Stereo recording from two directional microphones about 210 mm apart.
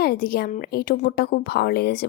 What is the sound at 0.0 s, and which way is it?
Speech, 45° left (ahead or behind).